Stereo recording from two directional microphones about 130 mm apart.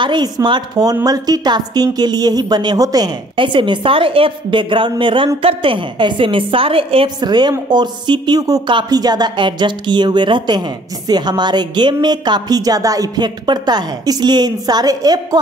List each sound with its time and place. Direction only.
0.0 s a woman's voice: 35° right (ahead or behind)
7.2 s speech: 35° right (ahead or behind)